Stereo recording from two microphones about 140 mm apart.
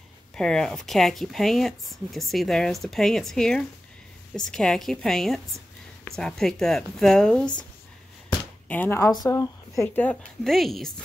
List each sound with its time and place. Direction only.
0.4 s speech: 5° left (ahead or behind)
8.6 s speech: 10° left (ahead or behind)
9.1 s speech: 25° left (ahead or behind)
10.0 s speech: centre (ahead or behind)